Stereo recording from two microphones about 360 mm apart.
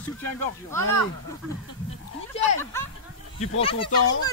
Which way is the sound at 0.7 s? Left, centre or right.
Centre.